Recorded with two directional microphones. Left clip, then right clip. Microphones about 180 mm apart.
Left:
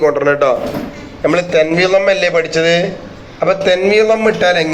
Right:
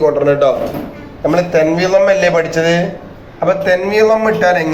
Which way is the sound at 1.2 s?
45° left (ahead or behind).